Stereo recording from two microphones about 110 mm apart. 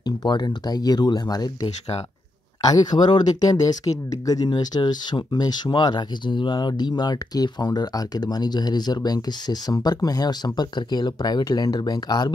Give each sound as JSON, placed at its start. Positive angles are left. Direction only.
{"t": 0.0, "sound": "speech", "side_deg": 40}